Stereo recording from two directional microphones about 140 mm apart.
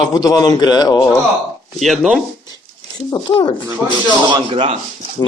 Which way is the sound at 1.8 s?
Centre (ahead or behind).